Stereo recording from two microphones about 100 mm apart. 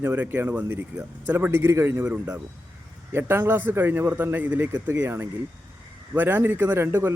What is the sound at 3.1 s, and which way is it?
Speech, 20° right (ahead or behind).